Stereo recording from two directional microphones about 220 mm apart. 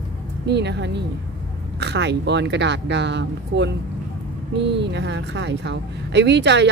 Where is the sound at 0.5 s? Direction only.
50° right (ahead or behind).